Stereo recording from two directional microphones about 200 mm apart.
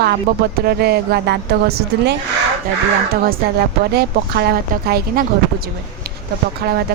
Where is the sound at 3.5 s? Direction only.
50° right (ahead or behind).